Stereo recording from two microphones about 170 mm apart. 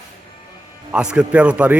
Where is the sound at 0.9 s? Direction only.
5° right (ahead or behind).